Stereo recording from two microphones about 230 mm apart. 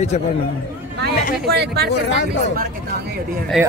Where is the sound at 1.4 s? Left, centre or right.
Right.